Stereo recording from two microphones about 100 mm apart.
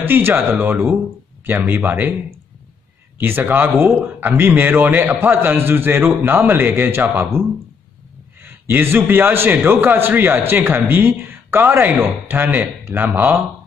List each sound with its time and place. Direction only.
0.0 s a man's voice: 20° right (ahead or behind)
3.2 s a man's voice: 20° right (ahead or behind)